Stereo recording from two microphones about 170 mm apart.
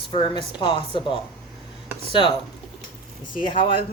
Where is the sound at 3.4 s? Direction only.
30° left (ahead or behind).